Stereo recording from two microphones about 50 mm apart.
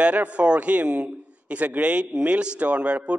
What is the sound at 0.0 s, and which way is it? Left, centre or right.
A man's voice, right.